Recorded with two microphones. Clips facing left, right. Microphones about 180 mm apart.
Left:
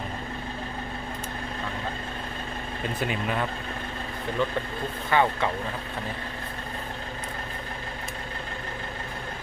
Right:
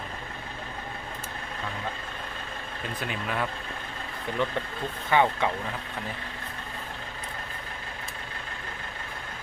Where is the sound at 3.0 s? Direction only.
Centre (ahead or behind).